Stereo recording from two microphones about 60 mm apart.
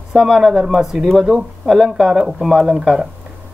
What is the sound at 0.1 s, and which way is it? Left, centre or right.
Speech, centre.